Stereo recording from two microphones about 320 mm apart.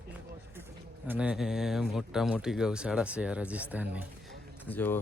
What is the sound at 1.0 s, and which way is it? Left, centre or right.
Speech, centre.